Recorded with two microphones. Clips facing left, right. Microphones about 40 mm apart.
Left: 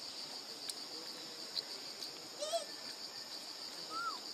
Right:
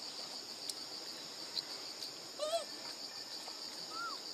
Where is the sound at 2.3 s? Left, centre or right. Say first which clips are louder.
Right 2 dB; right.